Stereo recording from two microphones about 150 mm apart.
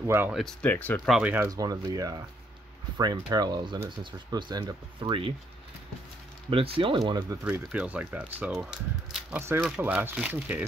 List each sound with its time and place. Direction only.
0.0 s speech: 15° right (ahead or behind)
0.3 s speech: centre (ahead or behind)
1.0 s speech: centre (ahead or behind)
1.5 s speech: 25° right (ahead or behind)
6.5 s speech: 40° right (ahead or behind)
7.0 s speech: 25° right (ahead or behind)
7.4 s speech: 10° right (ahead or behind)